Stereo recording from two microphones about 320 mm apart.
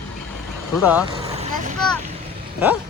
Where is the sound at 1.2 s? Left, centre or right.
Right.